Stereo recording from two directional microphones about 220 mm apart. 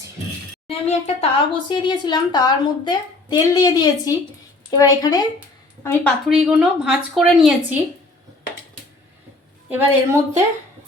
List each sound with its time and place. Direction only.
0.7 s speech: 25° left (ahead or behind); by 6.1 s 10° left (ahead or behind)
6.2 s a woman's voice: 5° right (ahead or behind)
9.6 s a woman's voice: 10° right (ahead or behind)